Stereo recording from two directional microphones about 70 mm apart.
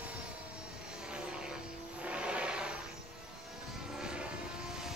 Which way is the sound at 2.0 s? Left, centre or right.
Centre.